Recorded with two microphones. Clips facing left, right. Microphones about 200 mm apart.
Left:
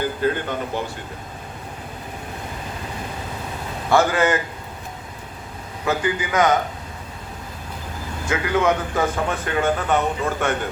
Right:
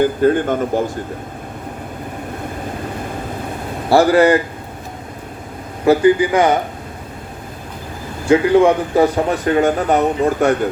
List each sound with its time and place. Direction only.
0.2 s speech: 45° right (ahead or behind)
3.8 s a man's voice: 35° right (ahead or behind)
5.8 s a man's voice: 35° right (ahead or behind)
8.3 s a man's voice: 30° right (ahead or behind)